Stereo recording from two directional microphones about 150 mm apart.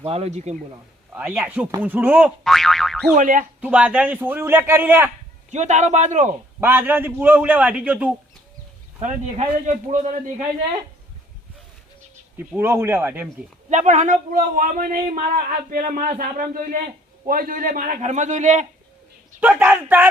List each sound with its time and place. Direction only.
0.0 s a man's voice: 45° right (ahead or behind)
1.1 s a man's voice: 15° right (ahead or behind)
2.4 s boing: centre (ahead or behind)
3.2 s a man's voice: 60° right (ahead or behind)
3.6 s a man's voice: 10° right (ahead or behind)
5.5 s a man's voice: 50° right (ahead or behind)
6.6 s a man's voice: 15° right (ahead or behind)
9.0 s a man's voice: 45° right (ahead or behind)
12.4 s a man's voice: 15° right (ahead or behind)
13.7 s a man's voice: 55° right (ahead or behind)
19.4 s a man's voice: 10° right (ahead or behind)